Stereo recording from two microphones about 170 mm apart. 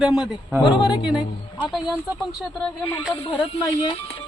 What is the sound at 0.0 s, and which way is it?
Speech, centre (ahead or behind).